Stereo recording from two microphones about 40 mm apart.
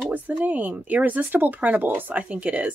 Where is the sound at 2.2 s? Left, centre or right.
Right.